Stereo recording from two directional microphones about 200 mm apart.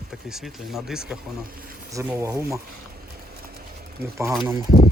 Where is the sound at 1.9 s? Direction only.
15° right (ahead or behind).